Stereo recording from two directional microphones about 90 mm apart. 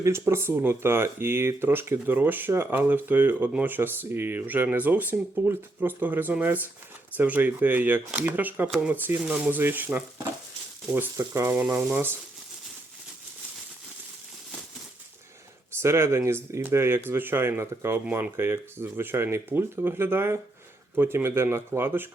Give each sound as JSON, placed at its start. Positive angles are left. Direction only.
{"t": 0.0, "sound": "speech", "side_deg": -30}
{"t": 8.7, "sound": "speech", "side_deg": -10}
{"t": 15.8, "sound": "speech", "side_deg": -30}